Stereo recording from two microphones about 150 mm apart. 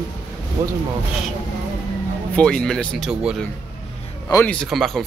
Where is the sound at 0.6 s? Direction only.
20° right (ahead or behind).